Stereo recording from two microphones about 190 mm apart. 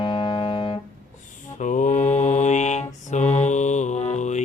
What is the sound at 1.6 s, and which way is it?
Mantra, 40° left (ahead or behind).